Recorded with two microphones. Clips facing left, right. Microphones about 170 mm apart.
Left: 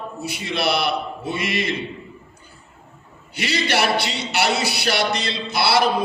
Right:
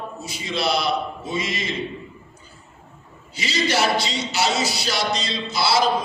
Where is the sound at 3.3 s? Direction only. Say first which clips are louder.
Left 1 dB; 65° left (ahead or behind).